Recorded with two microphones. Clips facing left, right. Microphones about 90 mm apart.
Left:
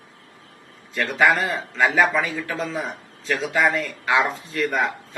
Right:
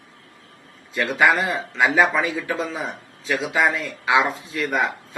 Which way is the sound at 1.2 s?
20° right (ahead or behind).